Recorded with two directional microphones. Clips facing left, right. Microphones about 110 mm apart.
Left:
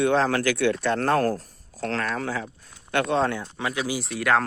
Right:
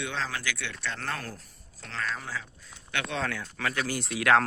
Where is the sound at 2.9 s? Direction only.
45° left (ahead or behind).